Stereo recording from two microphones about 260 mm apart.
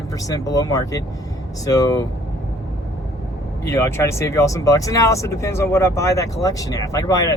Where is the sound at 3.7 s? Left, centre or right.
Centre.